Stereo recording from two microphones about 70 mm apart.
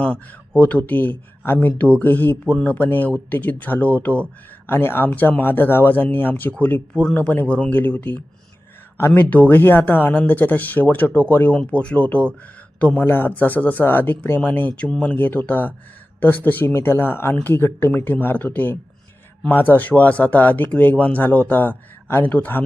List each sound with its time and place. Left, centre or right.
0.0 s speech: centre
4.6 s a man's voice: left; by 13.1 s centre
13.1 s speech: left